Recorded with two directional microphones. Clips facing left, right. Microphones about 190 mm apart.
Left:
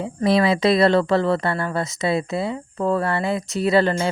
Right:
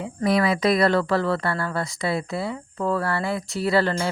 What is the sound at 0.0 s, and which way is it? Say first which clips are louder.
Speech: left 3 dB; 30° left (ahead or behind).